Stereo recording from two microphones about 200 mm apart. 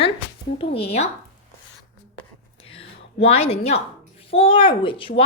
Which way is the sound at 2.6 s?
30° left (ahead or behind).